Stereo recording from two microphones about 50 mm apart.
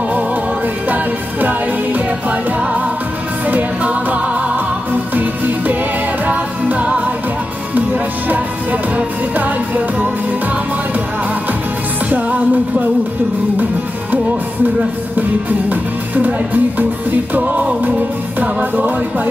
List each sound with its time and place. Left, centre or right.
0.8 s music: right
12.1 s music: right
15.7 s speech: right